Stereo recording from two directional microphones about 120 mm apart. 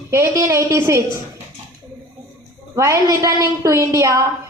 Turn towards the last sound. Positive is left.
turn(degrees=-25)  # may be behind; listen again after turning